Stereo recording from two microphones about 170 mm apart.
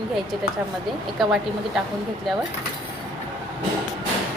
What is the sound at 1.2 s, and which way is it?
Speech, centre (ahead or behind).